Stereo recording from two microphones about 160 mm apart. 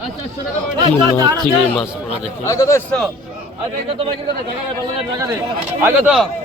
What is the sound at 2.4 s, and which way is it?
Speech, 20° left (ahead or behind).